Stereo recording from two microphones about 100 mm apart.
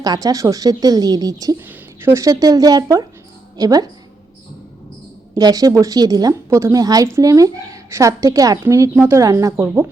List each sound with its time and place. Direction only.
0.0 s a woman's voice: 40° right (ahead or behind)
5.4 s a woman's voice: 40° right (ahead or behind)
8.6 s speech: 25° right (ahead or behind)